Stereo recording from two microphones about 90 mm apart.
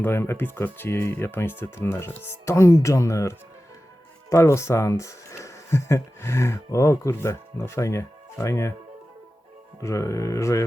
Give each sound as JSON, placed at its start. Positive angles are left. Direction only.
{"t": 0.0, "sound": "speech", "side_deg": 25}
{"t": 9.8, "sound": "speech", "side_deg": 35}